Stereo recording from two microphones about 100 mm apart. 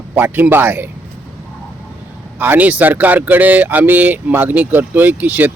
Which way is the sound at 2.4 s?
15° right (ahead or behind).